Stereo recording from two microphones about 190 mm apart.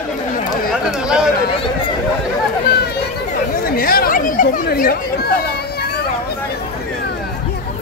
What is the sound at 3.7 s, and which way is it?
Speech, 50° left (ahead or behind).